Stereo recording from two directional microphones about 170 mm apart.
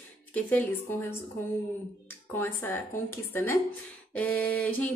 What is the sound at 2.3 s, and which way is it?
Speech, 10° left (ahead or behind).